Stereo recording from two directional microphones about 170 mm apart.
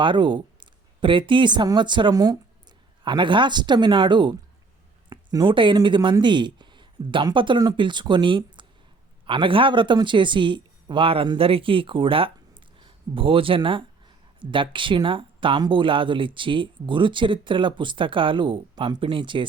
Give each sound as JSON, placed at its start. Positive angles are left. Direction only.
{"t": 0.0, "sound": "speech", "side_deg": -30}